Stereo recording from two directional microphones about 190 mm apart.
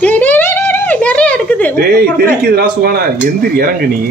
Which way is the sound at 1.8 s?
50° right (ahead or behind).